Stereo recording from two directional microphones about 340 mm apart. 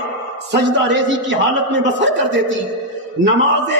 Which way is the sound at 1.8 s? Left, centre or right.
Right.